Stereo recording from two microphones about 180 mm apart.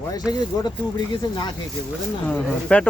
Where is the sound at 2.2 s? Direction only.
5° left (ahead or behind).